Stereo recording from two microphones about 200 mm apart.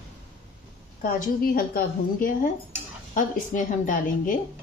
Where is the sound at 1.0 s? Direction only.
50° left (ahead or behind).